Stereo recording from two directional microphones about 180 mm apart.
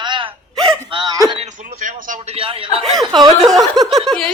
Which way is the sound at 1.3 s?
40° right (ahead or behind).